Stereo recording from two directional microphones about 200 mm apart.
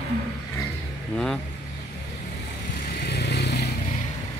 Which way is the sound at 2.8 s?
55° left (ahead or behind).